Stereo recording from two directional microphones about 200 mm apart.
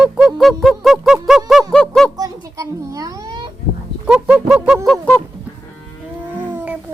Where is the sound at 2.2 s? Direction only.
15° right (ahead or behind).